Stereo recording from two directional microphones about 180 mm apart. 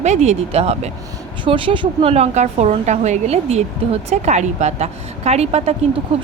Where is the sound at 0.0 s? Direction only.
40° right (ahead or behind).